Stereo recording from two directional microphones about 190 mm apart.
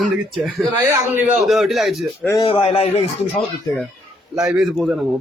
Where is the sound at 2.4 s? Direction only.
30° left (ahead or behind).